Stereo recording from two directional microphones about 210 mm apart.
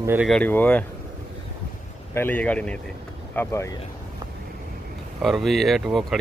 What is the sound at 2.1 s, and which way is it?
A man's voice, 10° left (ahead or behind).